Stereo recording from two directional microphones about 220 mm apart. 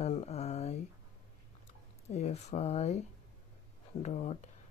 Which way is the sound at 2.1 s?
30° left (ahead or behind).